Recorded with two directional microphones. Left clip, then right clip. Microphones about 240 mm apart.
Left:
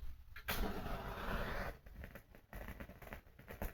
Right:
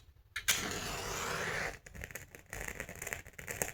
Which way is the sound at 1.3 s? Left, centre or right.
Right.